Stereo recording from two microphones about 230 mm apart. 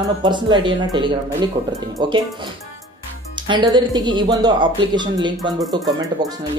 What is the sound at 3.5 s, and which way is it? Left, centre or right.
Speech, centre.